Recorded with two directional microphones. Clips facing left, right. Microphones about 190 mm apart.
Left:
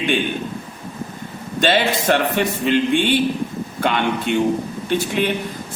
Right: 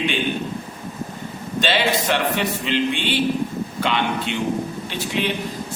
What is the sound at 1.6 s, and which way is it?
Speech, 50° left (ahead or behind).